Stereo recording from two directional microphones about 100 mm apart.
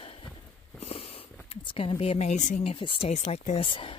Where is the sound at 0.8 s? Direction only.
90° left; by 1.9 s 65° left (ahead or behind).